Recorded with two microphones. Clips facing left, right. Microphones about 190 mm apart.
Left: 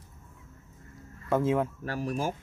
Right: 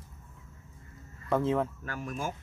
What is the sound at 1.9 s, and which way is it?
Speech, 35° left (ahead or behind).